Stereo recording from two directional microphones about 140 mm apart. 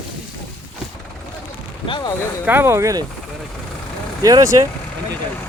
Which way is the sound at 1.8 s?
35° left (ahead or behind).